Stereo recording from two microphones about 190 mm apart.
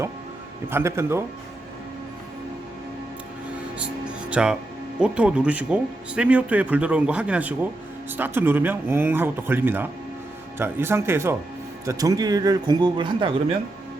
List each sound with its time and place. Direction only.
0.7 s speech: 15° right (ahead or behind)
4.3 s speech: 5° right (ahead or behind); by 13.6 s 25° right (ahead or behind)